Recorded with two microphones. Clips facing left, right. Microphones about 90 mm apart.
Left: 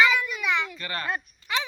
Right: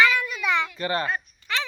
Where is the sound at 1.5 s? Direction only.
15° left (ahead or behind).